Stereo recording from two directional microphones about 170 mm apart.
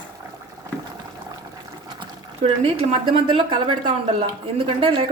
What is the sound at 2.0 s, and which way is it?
Speech, 35° right (ahead or behind).